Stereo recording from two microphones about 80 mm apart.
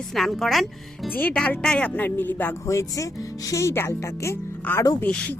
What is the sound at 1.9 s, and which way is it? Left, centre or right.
Speech, left.